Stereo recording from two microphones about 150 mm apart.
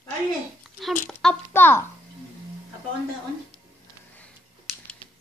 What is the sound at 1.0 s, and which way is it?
Speech, 10° left (ahead or behind).